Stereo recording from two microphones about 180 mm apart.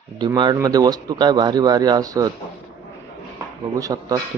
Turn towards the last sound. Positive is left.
turn(degrees=-20)  # may be behind; listen again after turning